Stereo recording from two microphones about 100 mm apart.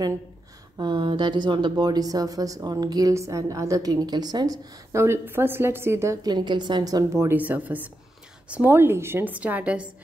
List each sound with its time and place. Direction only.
0.7 s speech: 50° right (ahead or behind)
4.9 s a woman's voice: 25° right (ahead or behind)
6.2 s a woman's voice: 50° right (ahead or behind)
7.2 s a woman's voice: 15° right (ahead or behind)